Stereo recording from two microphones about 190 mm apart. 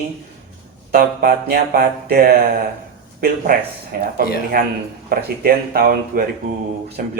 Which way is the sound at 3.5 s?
50° right (ahead or behind).